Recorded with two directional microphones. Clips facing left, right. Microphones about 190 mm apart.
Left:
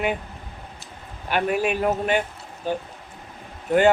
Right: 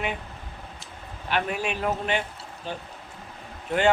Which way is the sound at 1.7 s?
45° left (ahead or behind).